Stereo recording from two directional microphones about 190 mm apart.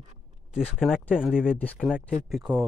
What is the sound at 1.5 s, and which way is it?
Speech, 10° left (ahead or behind).